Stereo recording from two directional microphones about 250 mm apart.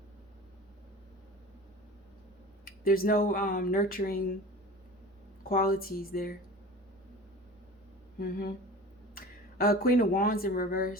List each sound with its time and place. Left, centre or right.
2.6 s speech: left
5.4 s speech: left
8.2 s speech: left